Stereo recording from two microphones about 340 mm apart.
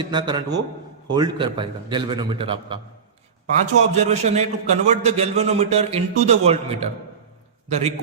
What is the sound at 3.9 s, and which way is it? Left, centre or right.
A man's voice, centre.